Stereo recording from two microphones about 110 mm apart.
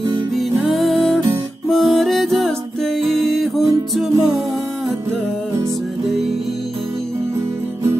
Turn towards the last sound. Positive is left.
turn(degrees=-25)  # may be behind; listen again after turning